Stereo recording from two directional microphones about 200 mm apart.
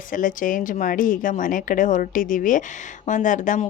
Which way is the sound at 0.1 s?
40° left (ahead or behind).